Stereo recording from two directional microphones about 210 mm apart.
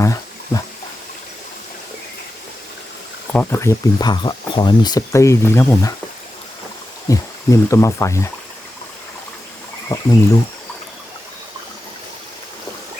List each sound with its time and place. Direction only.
0.0 s a sound: 15° left (ahead or behind)
3.3 s speech: 15° left (ahead or behind)
7.1 s speech: 15° left (ahead or behind)
9.9 s speech: 20° left (ahead or behind)